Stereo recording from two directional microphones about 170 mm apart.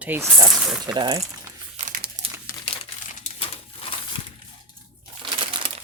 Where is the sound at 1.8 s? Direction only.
50° right (ahead or behind).